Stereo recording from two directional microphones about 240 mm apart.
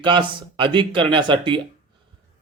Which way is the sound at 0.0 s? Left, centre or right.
Centre.